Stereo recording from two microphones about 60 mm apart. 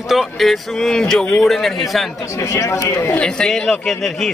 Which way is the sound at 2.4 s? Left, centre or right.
Left.